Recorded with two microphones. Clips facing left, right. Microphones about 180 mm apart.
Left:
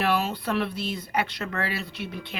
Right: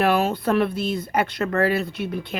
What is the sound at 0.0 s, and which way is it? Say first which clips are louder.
A woman's voice: right 6 dB; 50° right (ahead or behind).